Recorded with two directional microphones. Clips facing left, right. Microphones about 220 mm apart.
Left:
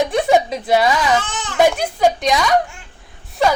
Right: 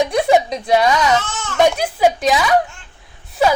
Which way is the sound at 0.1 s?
Centre (ahead or behind).